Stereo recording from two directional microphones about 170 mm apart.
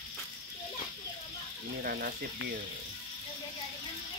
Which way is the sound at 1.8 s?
60° right (ahead or behind).